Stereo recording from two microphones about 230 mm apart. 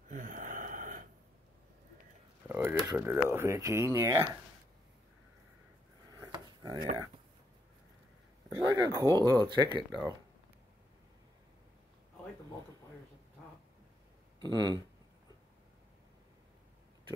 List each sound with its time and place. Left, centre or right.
0.1 s gasp: right
2.4 s speech: centre
6.1 s drawer open or close: centre
8.5 s speech: centre
14.4 s speech: centre